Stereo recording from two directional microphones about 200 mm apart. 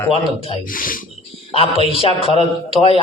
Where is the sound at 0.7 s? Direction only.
45° left (ahead or behind).